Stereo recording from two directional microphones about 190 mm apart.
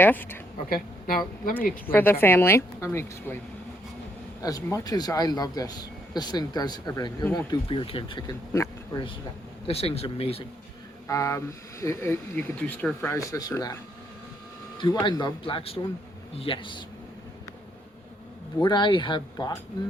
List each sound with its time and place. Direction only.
0.0 s speech: 10° left (ahead or behind)
0.7 s speech: 50° left (ahead or behind)
1.9 s speech: 10° left (ahead or behind)
4.4 s speech: 20° left (ahead or behind)
9.6 s speech: 30° left (ahead or behind)
11.1 s speech: 15° left (ahead or behind)
14.8 s speech: 20° left (ahead or behind)
18.6 s speech: 25° left (ahead or behind)